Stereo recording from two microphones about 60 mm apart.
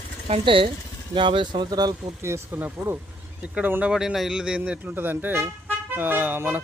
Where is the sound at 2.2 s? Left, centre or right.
Right.